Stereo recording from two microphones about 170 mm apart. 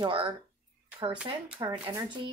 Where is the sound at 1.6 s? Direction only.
20° right (ahead or behind).